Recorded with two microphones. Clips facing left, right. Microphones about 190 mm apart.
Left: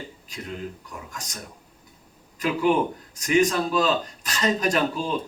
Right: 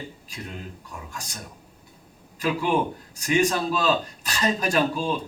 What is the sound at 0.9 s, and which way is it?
Speech, 30° right (ahead or behind).